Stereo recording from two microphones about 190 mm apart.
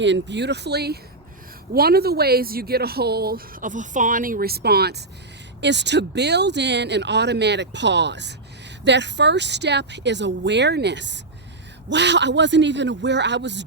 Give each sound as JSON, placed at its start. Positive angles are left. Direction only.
{"t": 0.0, "sound": "speech", "side_deg": -70}